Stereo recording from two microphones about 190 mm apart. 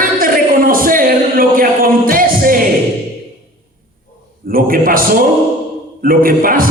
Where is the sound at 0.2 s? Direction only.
50° right (ahead or behind).